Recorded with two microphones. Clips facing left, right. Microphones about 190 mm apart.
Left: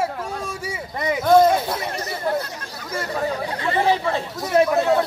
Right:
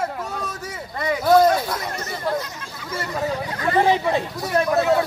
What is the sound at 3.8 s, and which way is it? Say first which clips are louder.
Speech: left 1 dB; 15° right (ahead or behind).